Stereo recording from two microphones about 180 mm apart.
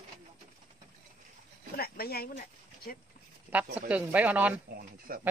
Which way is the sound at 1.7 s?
60° left (ahead or behind).